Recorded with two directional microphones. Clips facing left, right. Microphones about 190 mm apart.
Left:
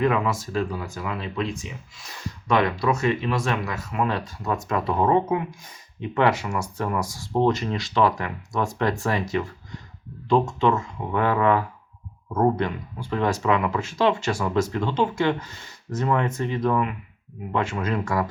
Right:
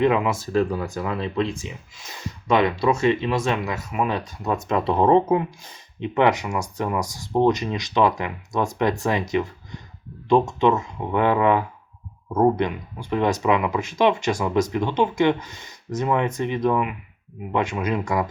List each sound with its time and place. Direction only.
0.0 s speech: 20° right (ahead or behind)
0.5 s speech: 45° right (ahead or behind)
2.0 s speech: 20° right (ahead or behind)
6.1 s speech: 15° right (ahead or behind)